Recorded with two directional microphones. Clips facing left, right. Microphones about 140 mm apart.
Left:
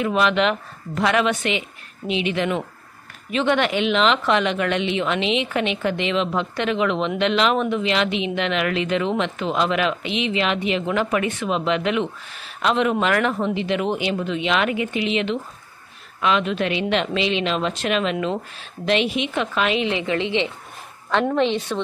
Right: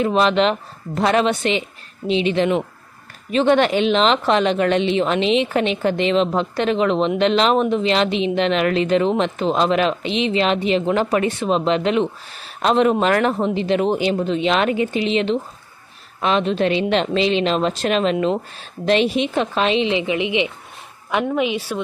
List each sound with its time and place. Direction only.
0.0 s a woman's voice: 30° right (ahead or behind); by 21.8 s 5° right (ahead or behind)